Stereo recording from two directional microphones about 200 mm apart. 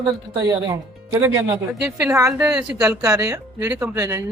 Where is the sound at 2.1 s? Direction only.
15° right (ahead or behind).